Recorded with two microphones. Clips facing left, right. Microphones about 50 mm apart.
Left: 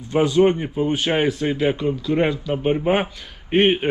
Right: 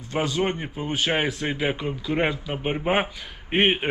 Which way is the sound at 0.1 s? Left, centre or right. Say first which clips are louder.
Left 8 dB; centre.